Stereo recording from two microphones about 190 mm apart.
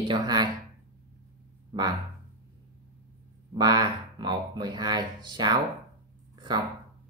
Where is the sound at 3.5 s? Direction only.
20° right (ahead or behind).